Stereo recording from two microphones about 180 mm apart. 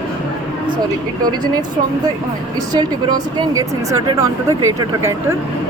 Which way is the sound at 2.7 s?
20° right (ahead or behind).